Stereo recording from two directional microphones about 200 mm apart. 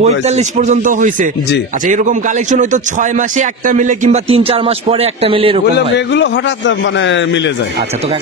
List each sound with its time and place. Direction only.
0.0 s a man's voice: 35° right (ahead or behind)
5.9 s a man's voice: 65° left (ahead or behind)